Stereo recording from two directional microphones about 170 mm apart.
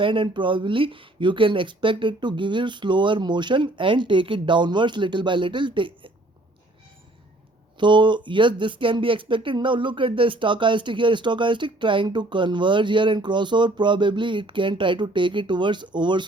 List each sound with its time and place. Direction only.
0.0 s speech: 30° right (ahead or behind)
7.8 s speech: 30° right (ahead or behind)